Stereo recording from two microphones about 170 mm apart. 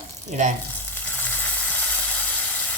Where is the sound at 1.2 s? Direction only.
10° left (ahead or behind).